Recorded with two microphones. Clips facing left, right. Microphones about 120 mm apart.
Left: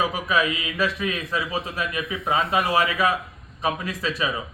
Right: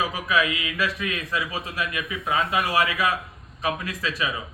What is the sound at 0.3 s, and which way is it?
A man's voice, 25° left (ahead or behind).